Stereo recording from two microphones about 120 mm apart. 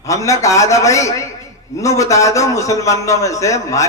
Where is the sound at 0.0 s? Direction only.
25° left (ahead or behind).